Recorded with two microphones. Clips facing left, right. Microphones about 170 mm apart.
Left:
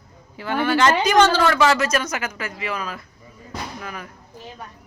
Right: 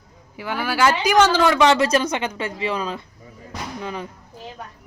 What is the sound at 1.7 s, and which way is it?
Speech, 30° right (ahead or behind).